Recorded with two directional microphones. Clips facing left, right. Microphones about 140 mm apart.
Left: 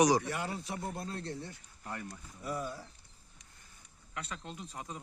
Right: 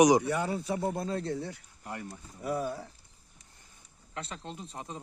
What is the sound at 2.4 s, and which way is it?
Speech, 60° right (ahead or behind).